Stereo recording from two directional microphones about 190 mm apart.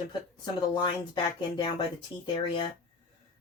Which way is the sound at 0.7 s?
20° left (ahead or behind).